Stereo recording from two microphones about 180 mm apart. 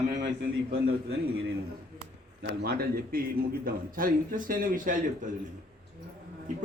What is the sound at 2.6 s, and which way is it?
A man's voice, 55° right (ahead or behind).